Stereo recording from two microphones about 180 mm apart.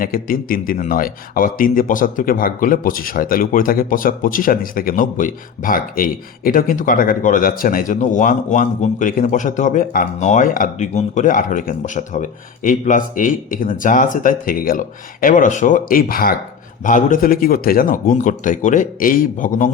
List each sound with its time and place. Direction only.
0.0 s speech: 50° left (ahead or behind)